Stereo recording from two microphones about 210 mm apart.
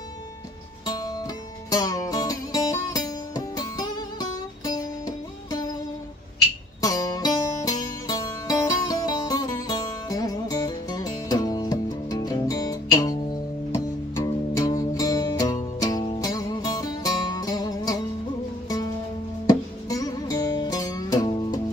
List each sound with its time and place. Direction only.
0.8 s music: 20° left (ahead or behind)
6.8 s music: 15° left (ahead or behind)
19.4 s music: 15° left (ahead or behind)